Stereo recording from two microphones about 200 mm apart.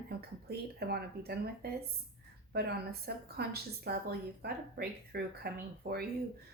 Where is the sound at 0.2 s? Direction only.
50° right (ahead or behind).